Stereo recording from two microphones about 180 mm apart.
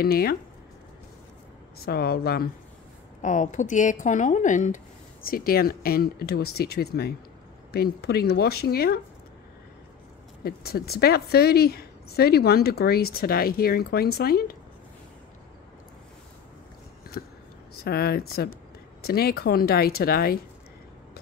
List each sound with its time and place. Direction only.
0.0 s a woman's voice: 60° left (ahead or behind)
1.8 s a woman's voice: 60° left (ahead or behind)
3.2 s a woman's voice: 45° left (ahead or behind); by 9.0 s 60° left (ahead or behind)
10.4 s a woman's voice: 60° left (ahead or behind)
17.1 s a woman's voice: 55° left (ahead or behind)